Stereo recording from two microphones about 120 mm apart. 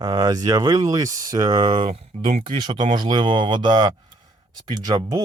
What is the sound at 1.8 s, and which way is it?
Speech, 55° right (ahead or behind).